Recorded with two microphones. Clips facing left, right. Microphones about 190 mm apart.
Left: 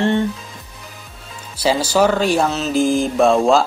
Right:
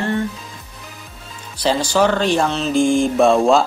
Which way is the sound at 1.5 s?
5° left (ahead or behind).